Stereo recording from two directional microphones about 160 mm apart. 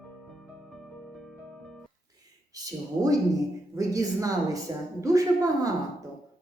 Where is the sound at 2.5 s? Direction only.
20° right (ahead or behind).